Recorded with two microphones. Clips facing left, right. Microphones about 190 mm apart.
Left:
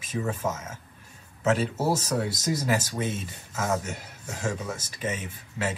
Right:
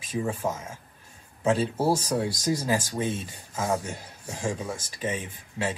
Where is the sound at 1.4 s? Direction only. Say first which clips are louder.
Right 1 dB; 10° right (ahead or behind).